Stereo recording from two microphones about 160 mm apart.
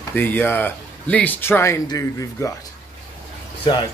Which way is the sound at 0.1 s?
10° left (ahead or behind).